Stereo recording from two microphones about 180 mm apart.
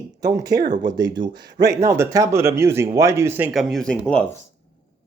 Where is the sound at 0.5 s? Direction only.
55° right (ahead or behind).